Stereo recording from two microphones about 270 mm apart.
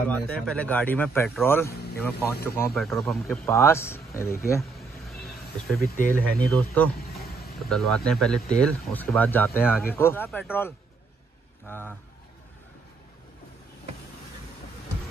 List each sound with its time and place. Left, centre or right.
0.1 s speech: centre
4.6 s a sound: centre
5.9 s speech: left
6.5 s speech: centre
7.0 s a sound: left
7.7 s speech: centre